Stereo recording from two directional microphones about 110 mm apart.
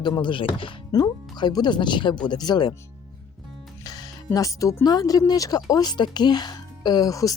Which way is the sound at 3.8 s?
35° left (ahead or behind).